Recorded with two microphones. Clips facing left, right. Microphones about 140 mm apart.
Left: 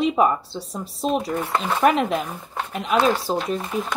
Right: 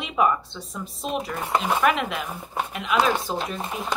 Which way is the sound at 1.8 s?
40° left (ahead or behind).